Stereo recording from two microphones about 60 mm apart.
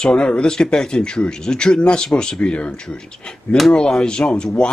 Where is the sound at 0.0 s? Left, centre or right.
Centre.